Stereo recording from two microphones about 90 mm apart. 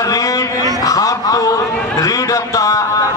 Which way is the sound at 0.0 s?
40° left (ahead or behind).